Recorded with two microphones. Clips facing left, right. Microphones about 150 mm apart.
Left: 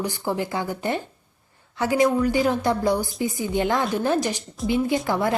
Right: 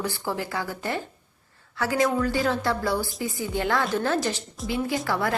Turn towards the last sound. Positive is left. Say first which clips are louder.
# left 4 dB
turn(degrees=20)  # may be behind; listen again after turning